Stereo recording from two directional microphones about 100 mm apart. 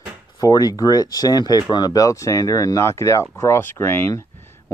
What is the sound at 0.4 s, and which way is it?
Speech, 40° left (ahead or behind).